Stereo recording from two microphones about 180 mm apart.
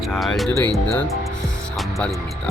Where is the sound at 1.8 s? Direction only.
Centre (ahead or behind).